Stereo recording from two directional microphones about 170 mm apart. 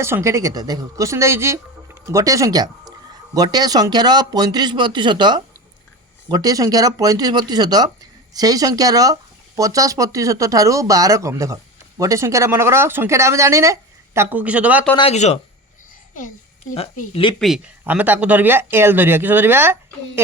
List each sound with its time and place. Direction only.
0.0 s speech: 15° right (ahead or behind)
14.9 s speech: 40° left (ahead or behind)
17.0 s speech: 35° left (ahead or behind)
17.4 s speech: 5° right (ahead or behind)